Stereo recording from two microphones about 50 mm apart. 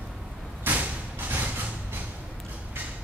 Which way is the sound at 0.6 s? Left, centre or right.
Right.